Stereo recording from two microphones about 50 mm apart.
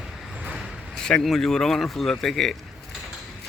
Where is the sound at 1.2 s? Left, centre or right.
Centre.